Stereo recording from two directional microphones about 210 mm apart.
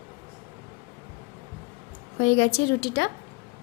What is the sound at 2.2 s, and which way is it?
Speech, 60° left (ahead or behind).